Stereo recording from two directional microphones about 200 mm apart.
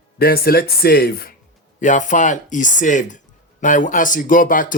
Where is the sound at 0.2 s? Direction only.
50° left (ahead or behind).